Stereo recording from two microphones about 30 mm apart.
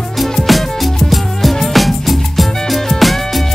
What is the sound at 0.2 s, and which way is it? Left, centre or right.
Music, centre.